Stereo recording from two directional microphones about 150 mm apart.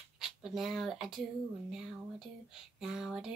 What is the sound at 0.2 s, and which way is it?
Speech, centre (ahead or behind).